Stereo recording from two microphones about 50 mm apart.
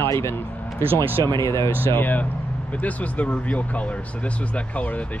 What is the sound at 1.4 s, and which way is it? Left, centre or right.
Speech, left.